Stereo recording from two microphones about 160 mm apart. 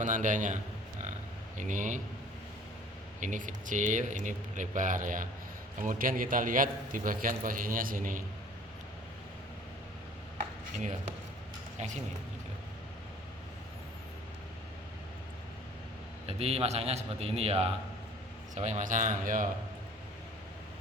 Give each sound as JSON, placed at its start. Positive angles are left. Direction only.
{"t": 0.0, "sound": "speech", "side_deg": -55}
{"t": 3.2, "sound": "a man's voice", "side_deg": -55}
{"t": 16.2, "sound": "a man's voice", "side_deg": -40}